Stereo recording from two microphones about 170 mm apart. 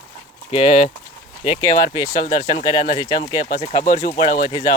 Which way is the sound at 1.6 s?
20° left (ahead or behind).